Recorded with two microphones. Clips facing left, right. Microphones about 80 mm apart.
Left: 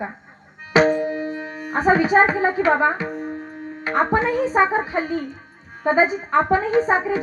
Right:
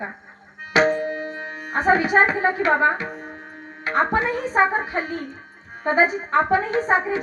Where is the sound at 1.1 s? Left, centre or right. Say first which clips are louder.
Left 3 dB; right.